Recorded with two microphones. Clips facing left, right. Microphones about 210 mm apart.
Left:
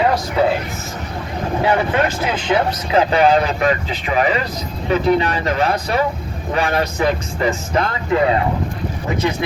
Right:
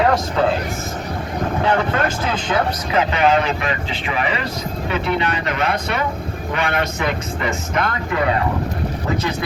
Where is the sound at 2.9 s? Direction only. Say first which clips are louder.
Left 4 dB; 35° left (ahead or behind).